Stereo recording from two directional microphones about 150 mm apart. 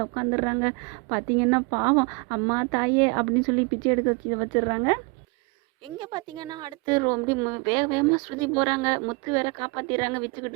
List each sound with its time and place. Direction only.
0.0 s a woman's voice: 25° right (ahead or behind)
6.0 s a woman's voice: 30° right (ahead or behind)